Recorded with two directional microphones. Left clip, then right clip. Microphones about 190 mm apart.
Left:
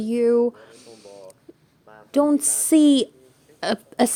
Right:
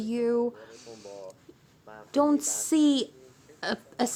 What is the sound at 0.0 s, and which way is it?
Speech, 30° left (ahead or behind).